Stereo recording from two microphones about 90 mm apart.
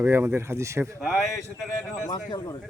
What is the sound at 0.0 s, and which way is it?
Speech, 25° right (ahead or behind).